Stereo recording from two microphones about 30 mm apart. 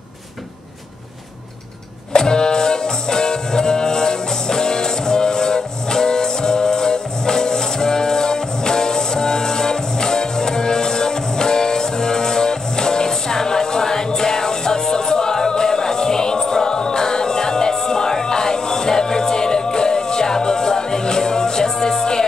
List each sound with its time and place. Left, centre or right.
2.1 s music: left